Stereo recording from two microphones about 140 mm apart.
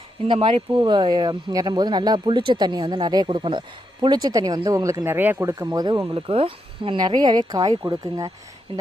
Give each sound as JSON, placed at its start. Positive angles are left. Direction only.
{"t": 0.3, "sound": "speech", "side_deg": -40}